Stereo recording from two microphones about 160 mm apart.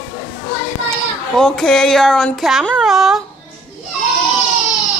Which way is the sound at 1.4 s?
5° left (ahead or behind).